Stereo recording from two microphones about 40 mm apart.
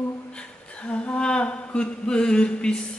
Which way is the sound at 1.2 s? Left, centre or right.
Left.